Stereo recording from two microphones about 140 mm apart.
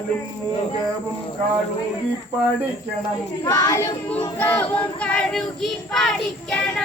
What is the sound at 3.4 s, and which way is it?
Child singing, 25° left (ahead or behind).